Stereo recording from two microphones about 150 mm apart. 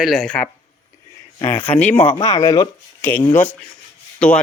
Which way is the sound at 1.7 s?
10° left (ahead or behind).